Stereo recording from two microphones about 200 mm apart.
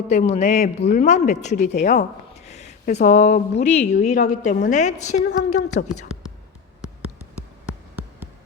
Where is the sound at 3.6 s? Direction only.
35° left (ahead or behind).